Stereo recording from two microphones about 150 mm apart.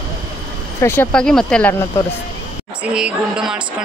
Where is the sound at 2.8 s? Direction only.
5° right (ahead or behind).